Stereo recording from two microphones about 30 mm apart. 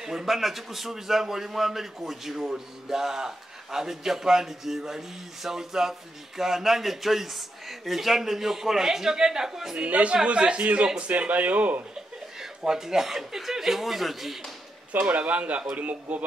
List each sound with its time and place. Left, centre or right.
0.0 s a man's voice: centre
0.4 s a man's voice: centre
9.8 s a man's voice: right
10.2 s speech: right
12.4 s a man's voice: centre
14.9 s a man's voice: right